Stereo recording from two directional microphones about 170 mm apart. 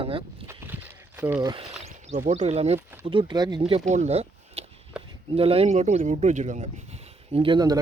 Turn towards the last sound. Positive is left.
turn(degrees=-25)  # may be behind; listen again after turning